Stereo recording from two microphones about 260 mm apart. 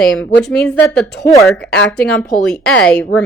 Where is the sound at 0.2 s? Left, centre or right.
Centre.